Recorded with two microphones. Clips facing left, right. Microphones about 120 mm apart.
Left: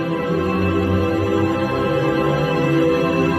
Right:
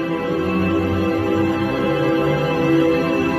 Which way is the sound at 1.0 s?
20° right (ahead or behind).